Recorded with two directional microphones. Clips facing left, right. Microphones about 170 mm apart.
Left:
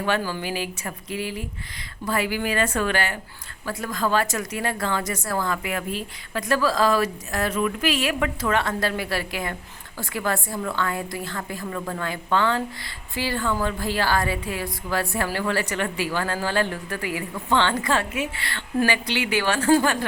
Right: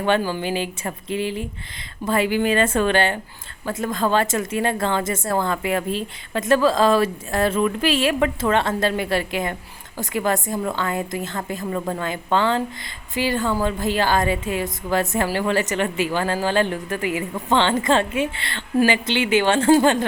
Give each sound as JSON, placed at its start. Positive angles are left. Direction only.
{"t": 0.0, "sound": "a woman's voice", "side_deg": -20}